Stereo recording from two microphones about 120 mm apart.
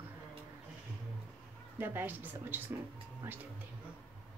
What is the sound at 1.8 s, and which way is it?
Speech, 15° right (ahead or behind).